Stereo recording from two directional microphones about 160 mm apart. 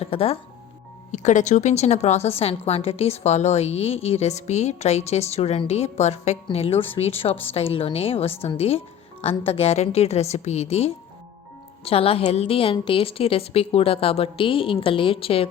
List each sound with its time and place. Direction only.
0.0 s speech: 35° left (ahead or behind)
1.1 s a woman's voice: 50° left (ahead or behind)